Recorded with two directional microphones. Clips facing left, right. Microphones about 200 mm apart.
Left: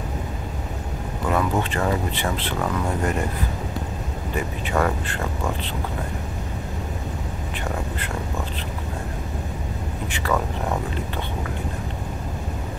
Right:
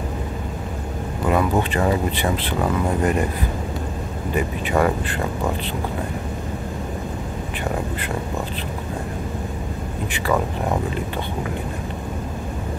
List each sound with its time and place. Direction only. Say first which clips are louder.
1.3 s speech: right 3 dB; 15° right (ahead or behind)
4.6 s speech: right 3 dB; 15° right (ahead or behind)
10.1 s speech: right 3 dB; 15° right (ahead or behind)